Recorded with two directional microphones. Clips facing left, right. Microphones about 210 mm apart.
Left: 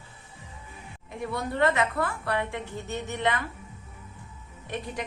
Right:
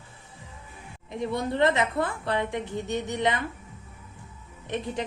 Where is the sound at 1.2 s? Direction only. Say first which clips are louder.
Right 2 dB; 20° right (ahead or behind).